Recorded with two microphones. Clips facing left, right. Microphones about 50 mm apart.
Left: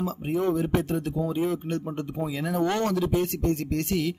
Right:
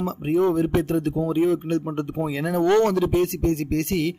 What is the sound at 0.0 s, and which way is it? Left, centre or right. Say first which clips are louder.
Speech: right 5 dB; right.